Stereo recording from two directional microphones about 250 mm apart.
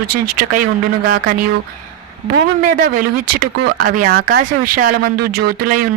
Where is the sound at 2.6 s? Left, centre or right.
Right.